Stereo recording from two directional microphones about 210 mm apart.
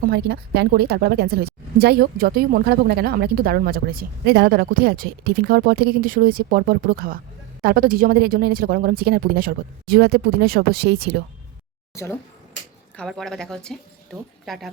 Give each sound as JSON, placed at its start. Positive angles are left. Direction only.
{"t": 0.0, "sound": "a woman's voice", "side_deg": -50}
{"t": 13.0, "sound": "speech", "side_deg": 0}